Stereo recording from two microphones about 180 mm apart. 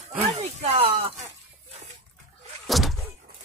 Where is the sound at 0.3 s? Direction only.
35° right (ahead or behind).